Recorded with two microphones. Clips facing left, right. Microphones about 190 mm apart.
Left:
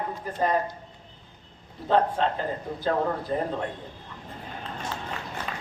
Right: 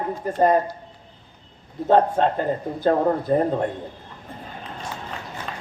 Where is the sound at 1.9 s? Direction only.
50° right (ahead or behind).